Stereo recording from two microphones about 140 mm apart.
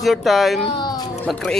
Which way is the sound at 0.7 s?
30° left (ahead or behind).